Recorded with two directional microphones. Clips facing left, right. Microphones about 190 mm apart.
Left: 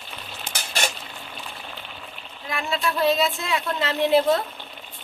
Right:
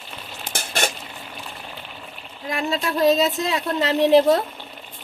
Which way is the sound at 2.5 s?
40° right (ahead or behind).